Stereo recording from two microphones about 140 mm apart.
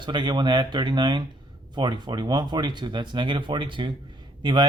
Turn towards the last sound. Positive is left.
turn(degrees=-35)  # may be behind; listen again after turning